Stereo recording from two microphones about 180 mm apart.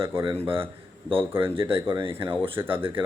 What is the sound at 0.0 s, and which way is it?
Speech, 15° right (ahead or behind).